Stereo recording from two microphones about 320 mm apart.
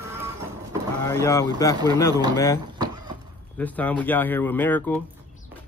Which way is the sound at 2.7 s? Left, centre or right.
Centre.